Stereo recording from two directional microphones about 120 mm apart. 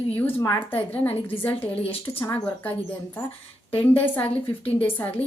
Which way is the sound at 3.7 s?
15° left (ahead or behind).